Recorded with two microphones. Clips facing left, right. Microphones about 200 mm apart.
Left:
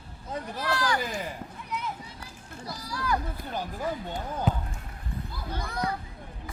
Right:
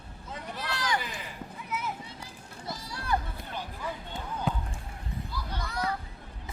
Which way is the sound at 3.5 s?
40° left (ahead or behind).